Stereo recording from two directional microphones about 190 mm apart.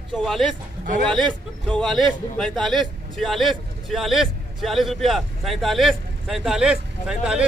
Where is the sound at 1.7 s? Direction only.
Centre (ahead or behind).